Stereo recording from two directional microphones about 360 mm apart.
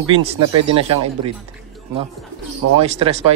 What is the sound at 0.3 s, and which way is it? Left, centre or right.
Speech, centre.